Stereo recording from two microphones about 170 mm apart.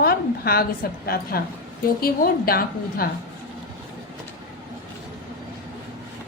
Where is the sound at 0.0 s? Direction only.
65° left (ahead or behind).